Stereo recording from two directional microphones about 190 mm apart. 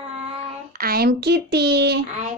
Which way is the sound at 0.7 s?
50° right (ahead or behind).